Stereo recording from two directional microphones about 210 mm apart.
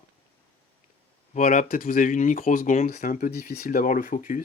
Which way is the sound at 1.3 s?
40° left (ahead or behind).